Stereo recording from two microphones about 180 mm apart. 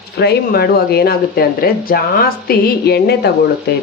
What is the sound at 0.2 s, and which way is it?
Speech, 65° left (ahead or behind).